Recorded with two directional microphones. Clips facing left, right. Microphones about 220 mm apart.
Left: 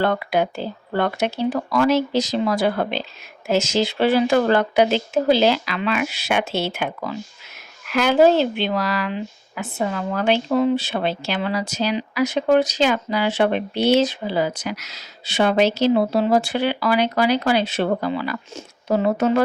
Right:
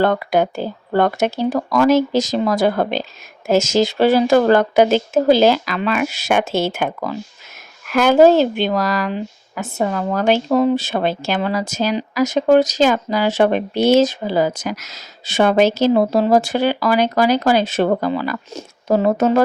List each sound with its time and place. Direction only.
0.0 s a woman's voice: 45° right (ahead or behind)